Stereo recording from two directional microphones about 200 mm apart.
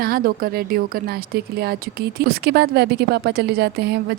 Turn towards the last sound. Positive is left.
turn(degrees=-55)  # may be behind; listen again after turning